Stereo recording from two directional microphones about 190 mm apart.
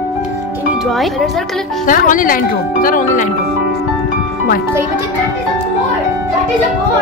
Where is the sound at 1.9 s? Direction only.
45° left (ahead or behind).